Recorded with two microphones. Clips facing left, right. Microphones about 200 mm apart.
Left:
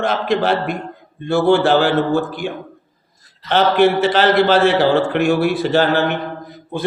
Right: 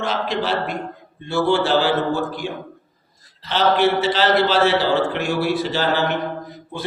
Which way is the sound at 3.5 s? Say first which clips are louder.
Left 4 dB; 55° left (ahead or behind).